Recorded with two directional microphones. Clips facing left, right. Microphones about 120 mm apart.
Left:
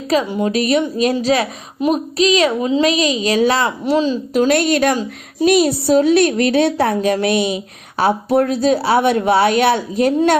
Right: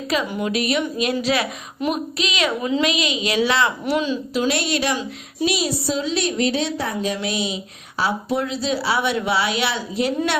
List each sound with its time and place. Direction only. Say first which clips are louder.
0.1 s a woman's voice: left 6 dB; 35° left (ahead or behind)
2.8 s a woman's voice: left 6 dB; 35° left (ahead or behind)
4.4 s a woman's voice: left 8 dB; 50° left (ahead or behind)